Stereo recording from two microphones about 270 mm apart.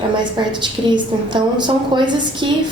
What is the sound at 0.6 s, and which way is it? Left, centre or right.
A woman's voice, centre.